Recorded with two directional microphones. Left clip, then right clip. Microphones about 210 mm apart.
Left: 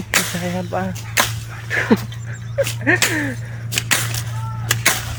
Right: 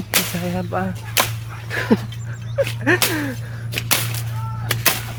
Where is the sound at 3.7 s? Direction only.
45° left (ahead or behind).